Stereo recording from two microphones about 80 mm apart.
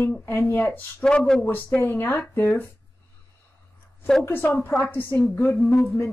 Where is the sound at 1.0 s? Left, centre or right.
Centre.